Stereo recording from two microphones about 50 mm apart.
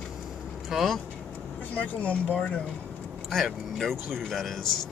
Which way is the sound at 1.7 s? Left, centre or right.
Left.